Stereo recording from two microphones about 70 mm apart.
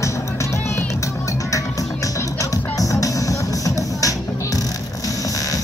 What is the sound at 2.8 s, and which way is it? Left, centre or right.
Music, left.